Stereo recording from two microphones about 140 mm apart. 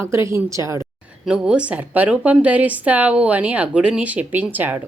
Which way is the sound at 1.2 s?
5° right (ahead or behind).